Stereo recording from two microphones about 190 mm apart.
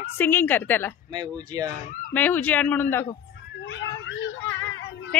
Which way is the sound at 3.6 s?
75° left (ahead or behind).